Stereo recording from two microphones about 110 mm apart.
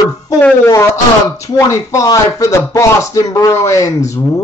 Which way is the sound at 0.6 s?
30° left (ahead or behind).